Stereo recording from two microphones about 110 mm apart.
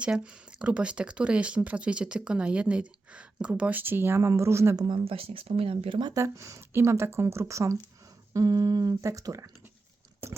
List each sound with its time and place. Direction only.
0.0 s speech: 10° right (ahead or behind)
5.0 s speech: 60° right (ahead or behind)
6.1 s speech: 30° right (ahead or behind)